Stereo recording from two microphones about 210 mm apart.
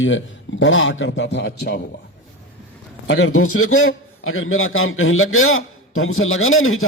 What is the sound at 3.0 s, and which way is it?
A man's voice, 70° left (ahead or behind).